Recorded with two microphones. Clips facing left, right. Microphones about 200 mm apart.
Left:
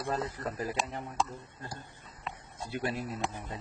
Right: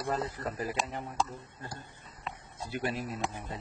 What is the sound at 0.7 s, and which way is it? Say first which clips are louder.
Speech: even; centre (ahead or behind).